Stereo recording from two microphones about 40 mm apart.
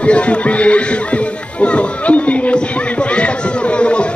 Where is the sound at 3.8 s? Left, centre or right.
Left.